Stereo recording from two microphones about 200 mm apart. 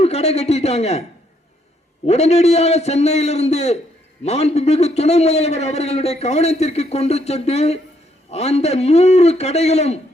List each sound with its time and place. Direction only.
0.0 s a man's voice: 30° left (ahead or behind)
2.0 s a man's voice: 30° left (ahead or behind)